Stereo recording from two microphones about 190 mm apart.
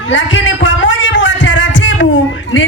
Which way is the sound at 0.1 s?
90° left.